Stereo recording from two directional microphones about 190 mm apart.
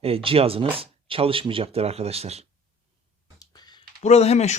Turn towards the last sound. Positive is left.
turn(degrees=35)  # may be behind; listen again after turning